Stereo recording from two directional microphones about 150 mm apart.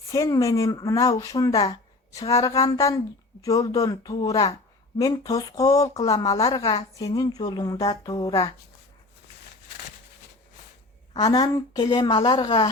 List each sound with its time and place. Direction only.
0.1 s speech: 25° left (ahead or behind)
11.1 s speech: 25° left (ahead or behind)